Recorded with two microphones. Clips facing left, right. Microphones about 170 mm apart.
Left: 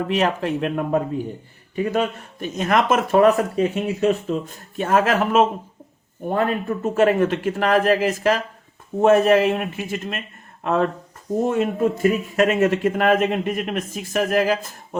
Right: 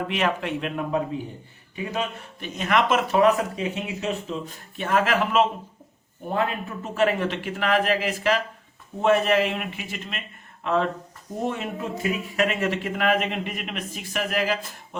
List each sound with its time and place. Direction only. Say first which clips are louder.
0.1 s speech: left 6 dB; 40° left (ahead or behind)